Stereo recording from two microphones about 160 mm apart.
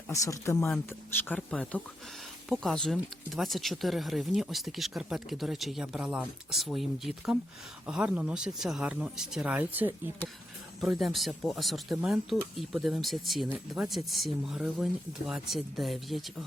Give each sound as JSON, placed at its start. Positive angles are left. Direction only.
{"t": 0.1, "sound": "speech", "side_deg": 20}